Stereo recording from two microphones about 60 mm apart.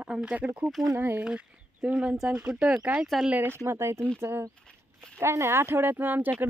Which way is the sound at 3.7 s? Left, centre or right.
Right.